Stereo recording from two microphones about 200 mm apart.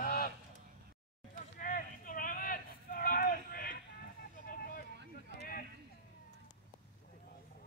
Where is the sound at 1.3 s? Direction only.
45° left (ahead or behind).